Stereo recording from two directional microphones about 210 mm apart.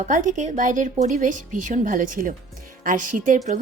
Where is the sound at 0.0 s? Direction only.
35° right (ahead or behind).